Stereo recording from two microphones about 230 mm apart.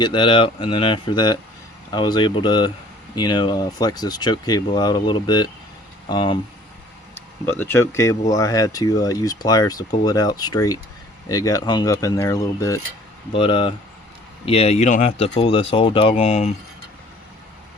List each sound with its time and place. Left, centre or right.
0.0 s speech: left
7.5 s speech: centre; by 16.5 s left